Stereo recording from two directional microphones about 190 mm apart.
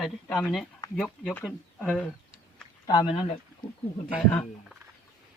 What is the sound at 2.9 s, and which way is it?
Speech, 25° left (ahead or behind).